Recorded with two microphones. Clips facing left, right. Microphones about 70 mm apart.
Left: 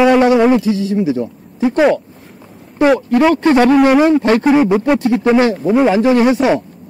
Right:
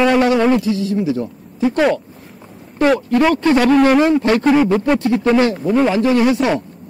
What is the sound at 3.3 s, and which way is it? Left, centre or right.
Speech, left.